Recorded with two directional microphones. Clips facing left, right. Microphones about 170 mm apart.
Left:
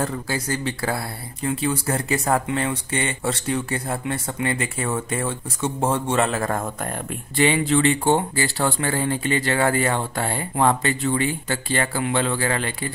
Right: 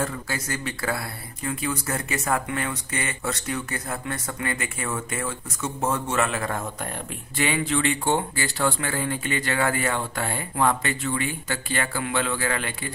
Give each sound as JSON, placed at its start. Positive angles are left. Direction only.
{"t": 0.0, "sound": "speech", "side_deg": 30}
{"t": 7.3, "sound": "speech", "side_deg": 30}